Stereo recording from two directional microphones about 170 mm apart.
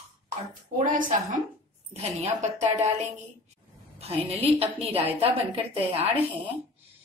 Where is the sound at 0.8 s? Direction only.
50° right (ahead or behind).